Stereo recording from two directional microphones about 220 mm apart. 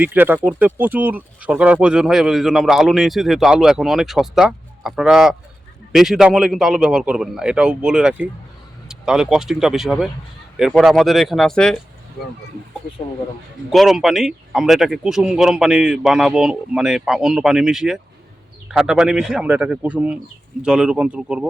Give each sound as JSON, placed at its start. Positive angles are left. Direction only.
{"t": 0.0, "sound": "speech", "side_deg": -10}
{"t": 13.7, "sound": "speech", "side_deg": 0}